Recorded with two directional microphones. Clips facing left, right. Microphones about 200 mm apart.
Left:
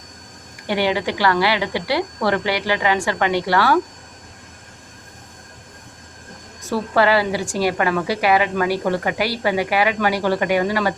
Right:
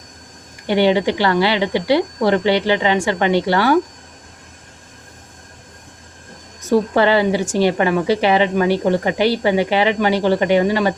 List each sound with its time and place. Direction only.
0.7 s a woman's voice: 25° right (ahead or behind)
6.6 s a woman's voice: 20° right (ahead or behind)